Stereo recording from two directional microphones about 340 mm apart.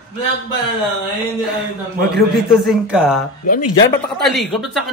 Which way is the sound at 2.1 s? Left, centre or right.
Centre.